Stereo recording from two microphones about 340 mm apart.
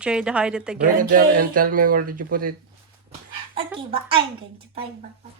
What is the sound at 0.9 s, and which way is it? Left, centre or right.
Speech, right.